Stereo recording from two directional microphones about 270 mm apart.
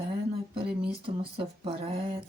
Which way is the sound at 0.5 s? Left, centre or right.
Centre.